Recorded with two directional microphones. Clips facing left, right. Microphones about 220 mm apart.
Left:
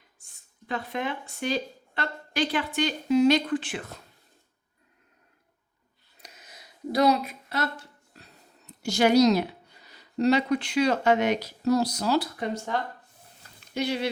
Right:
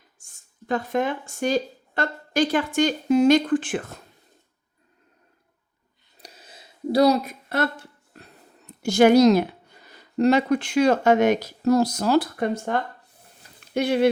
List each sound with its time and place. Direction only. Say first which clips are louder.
0.2 s speech: right 6 dB; 45° right (ahead or behind)
6.2 s a sound: right 4 dB; 30° right (ahead or behind)
7.5 s speech: right 6 dB; 55° right (ahead or behind)